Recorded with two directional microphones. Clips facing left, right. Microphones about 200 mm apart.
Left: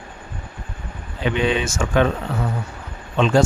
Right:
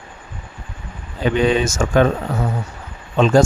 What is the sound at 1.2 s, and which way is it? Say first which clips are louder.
Speech: right 4 dB; 40° right (ahead or behind).